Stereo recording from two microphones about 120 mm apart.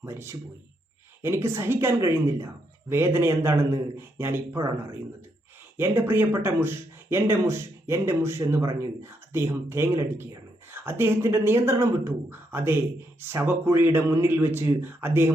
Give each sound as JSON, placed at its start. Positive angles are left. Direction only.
{"t": 0.0, "sound": "speech", "side_deg": -20}